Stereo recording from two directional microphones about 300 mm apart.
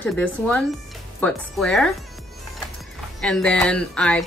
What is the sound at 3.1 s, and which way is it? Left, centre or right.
Speech, centre.